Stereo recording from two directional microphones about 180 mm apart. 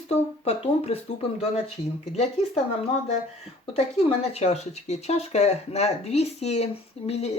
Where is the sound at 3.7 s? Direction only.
35° left (ahead or behind).